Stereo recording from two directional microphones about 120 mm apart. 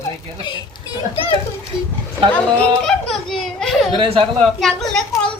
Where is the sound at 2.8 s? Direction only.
5° left (ahead or behind).